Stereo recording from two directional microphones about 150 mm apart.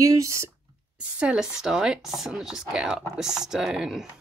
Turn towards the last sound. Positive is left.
turn(degrees=-5)  # may be behind; listen again after turning